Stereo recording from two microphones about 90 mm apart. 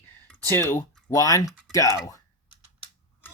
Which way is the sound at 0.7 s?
35° left (ahead or behind).